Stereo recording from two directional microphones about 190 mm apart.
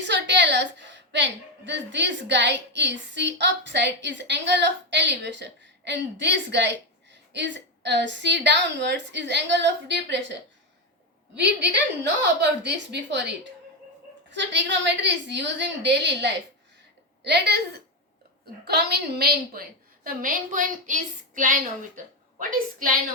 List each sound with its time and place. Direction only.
0.0 s a woman's voice: 70° right (ahead or behind)
11.3 s a woman's voice: 65° right (ahead or behind); by 23.0 s 45° right (ahead or behind)